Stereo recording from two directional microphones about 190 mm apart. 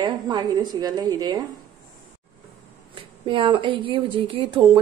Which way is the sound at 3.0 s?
25° right (ahead or behind).